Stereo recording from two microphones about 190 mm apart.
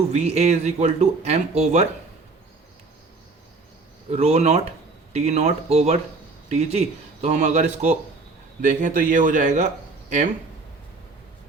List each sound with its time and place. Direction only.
0.1 s speech: 35° right (ahead or behind)
4.1 s speech: 35° right (ahead or behind)